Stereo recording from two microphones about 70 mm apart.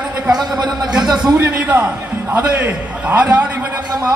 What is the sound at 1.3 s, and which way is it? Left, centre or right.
A man's voice, right.